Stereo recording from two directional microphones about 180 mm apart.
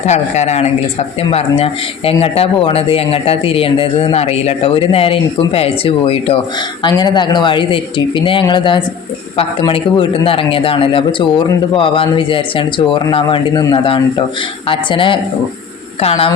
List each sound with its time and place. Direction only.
0.0 s a man's voice: 40° left (ahead or behind)